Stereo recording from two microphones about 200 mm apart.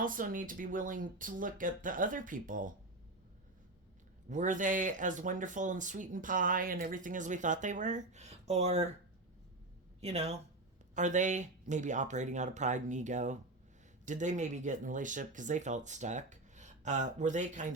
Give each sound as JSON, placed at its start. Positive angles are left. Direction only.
{"t": 0.0, "sound": "speech", "side_deg": -45}
{"t": 4.3, "sound": "speech", "side_deg": -40}
{"t": 10.0, "sound": "speech", "side_deg": -30}